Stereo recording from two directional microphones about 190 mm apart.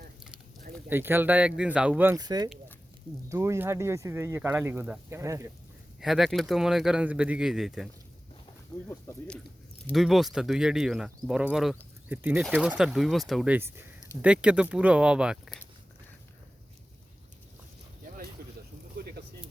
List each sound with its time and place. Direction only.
0.9 s speech: 10° right (ahead or behind)
2.1 s speech: 20° right (ahead or behind)
6.0 s speech: centre (ahead or behind)
8.9 s speech: 10° left (ahead or behind)
18.4 s a sound: 55° right (ahead or behind)